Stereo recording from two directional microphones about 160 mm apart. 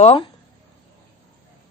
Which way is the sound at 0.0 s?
40° left (ahead or behind).